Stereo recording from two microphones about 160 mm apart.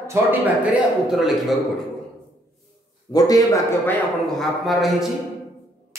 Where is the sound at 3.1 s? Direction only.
25° left (ahead or behind).